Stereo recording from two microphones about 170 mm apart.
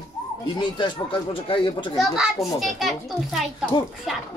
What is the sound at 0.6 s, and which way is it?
Speech, 30° left (ahead or behind).